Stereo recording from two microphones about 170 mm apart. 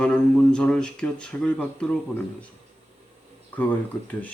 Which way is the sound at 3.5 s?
10° left (ahead or behind).